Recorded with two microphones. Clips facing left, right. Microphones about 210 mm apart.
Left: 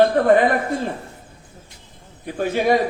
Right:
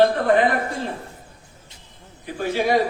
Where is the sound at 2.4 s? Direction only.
50° left (ahead or behind).